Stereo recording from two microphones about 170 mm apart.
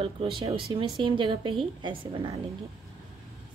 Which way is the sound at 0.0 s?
30° right (ahead or behind).